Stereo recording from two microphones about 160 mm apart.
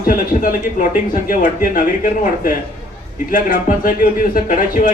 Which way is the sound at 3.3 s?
60° left (ahead or behind).